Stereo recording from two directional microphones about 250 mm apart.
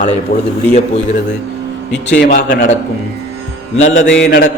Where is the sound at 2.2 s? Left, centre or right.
Left.